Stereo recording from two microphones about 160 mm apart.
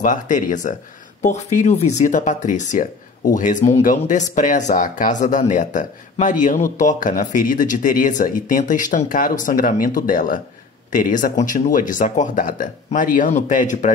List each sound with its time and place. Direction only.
0.0 s speech: 50° left (ahead or behind)